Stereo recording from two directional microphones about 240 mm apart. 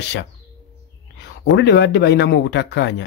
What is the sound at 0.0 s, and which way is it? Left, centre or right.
Speech, left.